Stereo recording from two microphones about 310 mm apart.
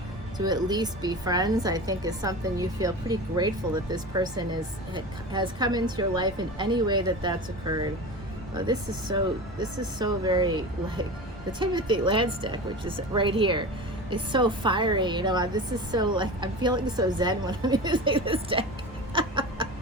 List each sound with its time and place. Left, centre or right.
0.3 s a woman's voice: centre
19.1 s chicken: centre